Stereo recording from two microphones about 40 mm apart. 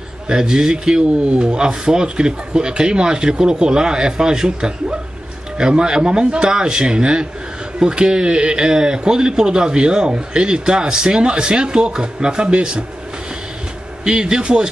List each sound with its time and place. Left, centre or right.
0.3 s a man's voice: centre
14.0 s a man's voice: centre